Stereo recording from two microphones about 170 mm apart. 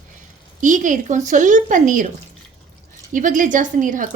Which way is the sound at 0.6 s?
50° right (ahead or behind).